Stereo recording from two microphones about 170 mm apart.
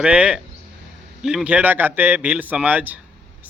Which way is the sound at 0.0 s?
5° right (ahead or behind).